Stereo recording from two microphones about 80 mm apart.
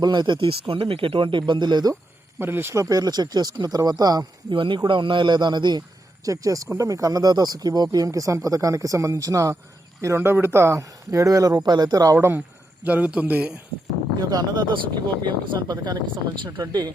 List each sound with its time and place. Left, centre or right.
0.0 s speech: right
2.4 s speech: right
2.8 s speech: right
4.5 s speech: right
6.2 s speech: right
10.2 s speech: right
12.1 s speech: right
12.8 s speech: centre
14.2 s speech: right